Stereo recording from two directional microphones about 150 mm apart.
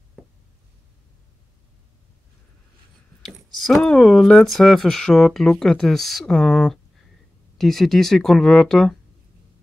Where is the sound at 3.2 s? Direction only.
Centre (ahead or behind).